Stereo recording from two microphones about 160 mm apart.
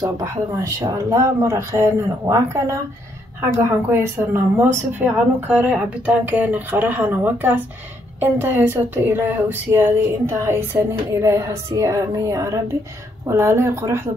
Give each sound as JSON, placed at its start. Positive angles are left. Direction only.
{"t": 0.0, "sound": "speech", "side_deg": -20}